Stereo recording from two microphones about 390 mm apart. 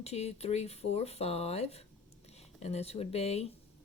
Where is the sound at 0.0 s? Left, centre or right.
Centre.